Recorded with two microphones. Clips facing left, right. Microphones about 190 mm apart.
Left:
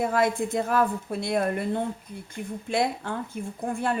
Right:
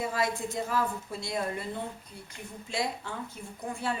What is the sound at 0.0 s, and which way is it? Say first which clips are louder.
A woman's voice: left 7 dB; 55° left (ahead or behind).